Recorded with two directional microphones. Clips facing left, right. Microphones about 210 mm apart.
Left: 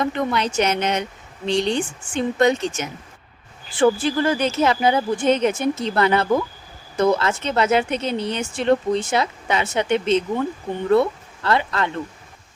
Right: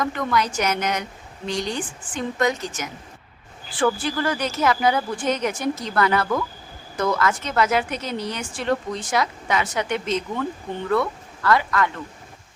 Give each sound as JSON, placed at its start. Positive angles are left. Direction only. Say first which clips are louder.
{"t": 0.0, "sound": "a woman's voice", "louder": "left 2 dB", "side_deg": 25}